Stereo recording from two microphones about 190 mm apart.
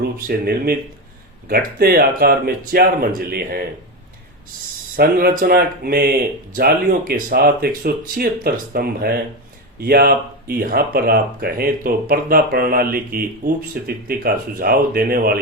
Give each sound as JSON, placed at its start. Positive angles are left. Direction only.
{"t": 0.0, "sound": "speech", "side_deg": -55}
{"t": 4.9, "sound": "speech", "side_deg": -50}